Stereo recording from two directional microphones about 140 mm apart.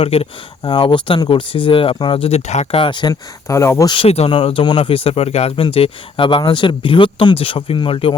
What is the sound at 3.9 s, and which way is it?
Speech, 45° left (ahead or behind).